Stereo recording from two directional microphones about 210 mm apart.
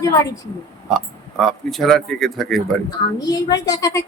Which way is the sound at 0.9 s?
Centre (ahead or behind).